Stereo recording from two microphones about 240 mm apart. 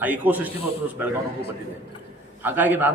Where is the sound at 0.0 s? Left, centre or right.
Centre.